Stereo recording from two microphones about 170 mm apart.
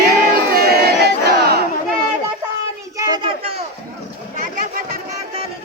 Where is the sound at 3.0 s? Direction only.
25° right (ahead or behind).